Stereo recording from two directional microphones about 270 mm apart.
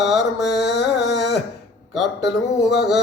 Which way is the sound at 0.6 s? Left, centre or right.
Left.